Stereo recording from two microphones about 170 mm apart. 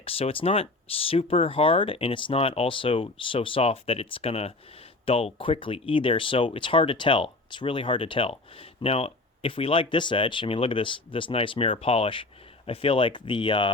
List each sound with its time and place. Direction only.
0.0 s speech: 35° left (ahead or behind)